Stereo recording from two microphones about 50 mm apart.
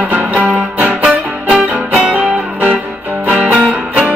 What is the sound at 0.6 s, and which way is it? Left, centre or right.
Music, right.